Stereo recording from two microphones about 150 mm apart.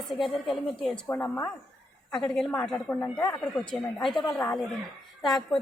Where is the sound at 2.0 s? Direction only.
5° left (ahead or behind).